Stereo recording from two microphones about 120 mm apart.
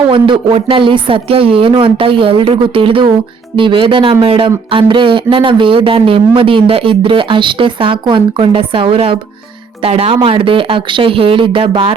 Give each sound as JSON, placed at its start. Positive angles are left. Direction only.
{"t": 0.1, "sound": "speech", "side_deg": -45}